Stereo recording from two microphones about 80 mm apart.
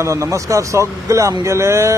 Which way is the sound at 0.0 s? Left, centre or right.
Right.